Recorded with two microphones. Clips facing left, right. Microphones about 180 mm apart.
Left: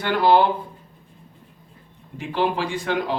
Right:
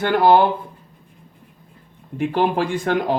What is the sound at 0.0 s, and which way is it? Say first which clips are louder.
Speech: right 3 dB; 50° right (ahead or behind).